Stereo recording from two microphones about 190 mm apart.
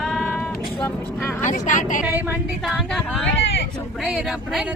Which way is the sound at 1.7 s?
40° left (ahead or behind).